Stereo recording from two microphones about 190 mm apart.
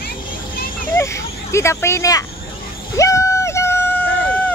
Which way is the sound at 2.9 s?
15° left (ahead or behind).